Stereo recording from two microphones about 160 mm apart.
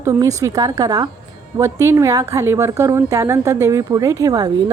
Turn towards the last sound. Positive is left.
turn(degrees=-25)  # may be behind; listen again after turning